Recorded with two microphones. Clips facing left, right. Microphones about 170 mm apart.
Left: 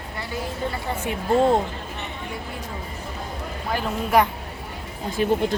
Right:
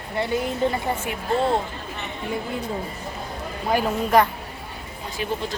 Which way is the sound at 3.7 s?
15° right (ahead or behind).